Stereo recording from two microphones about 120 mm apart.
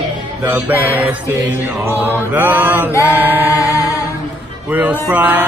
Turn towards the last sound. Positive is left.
turn(degrees=-15)  # may be behind; listen again after turning